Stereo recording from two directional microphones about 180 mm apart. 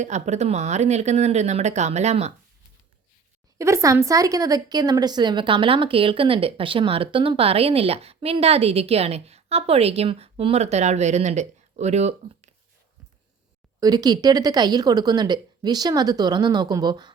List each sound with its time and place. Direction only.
0.0 s a woman's voice: 40° right (ahead or behind)
3.6 s a woman's voice: 15° right (ahead or behind); by 12.5 s 35° right (ahead or behind)
13.7 s speech: 20° right (ahead or behind)